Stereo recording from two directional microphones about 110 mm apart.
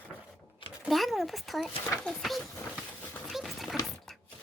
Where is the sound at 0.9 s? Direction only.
Centre (ahead or behind).